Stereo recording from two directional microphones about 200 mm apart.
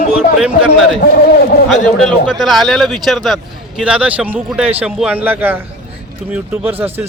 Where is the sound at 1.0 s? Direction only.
50° left (ahead or behind).